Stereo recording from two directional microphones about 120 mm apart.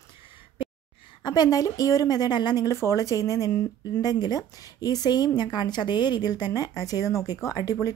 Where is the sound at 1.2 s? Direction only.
35° left (ahead or behind).